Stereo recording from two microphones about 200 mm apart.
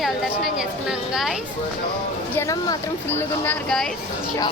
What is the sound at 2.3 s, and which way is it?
Speech, 15° left (ahead or behind).